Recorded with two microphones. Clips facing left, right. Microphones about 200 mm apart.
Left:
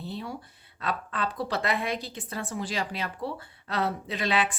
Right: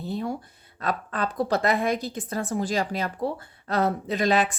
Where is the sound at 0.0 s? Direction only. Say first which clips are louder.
Right 7 dB; 45° right (ahead or behind).